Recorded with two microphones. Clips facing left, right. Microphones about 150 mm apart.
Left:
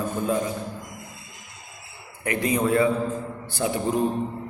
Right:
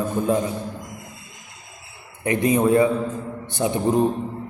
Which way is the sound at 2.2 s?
20° right (ahead or behind).